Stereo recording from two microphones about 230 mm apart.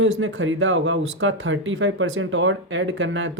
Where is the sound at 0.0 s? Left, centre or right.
Right.